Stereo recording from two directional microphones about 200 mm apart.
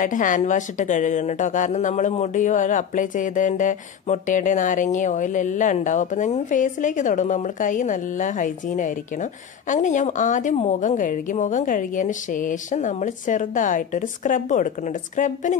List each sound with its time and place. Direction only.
0.0 s a woman's voice: 40° left (ahead or behind)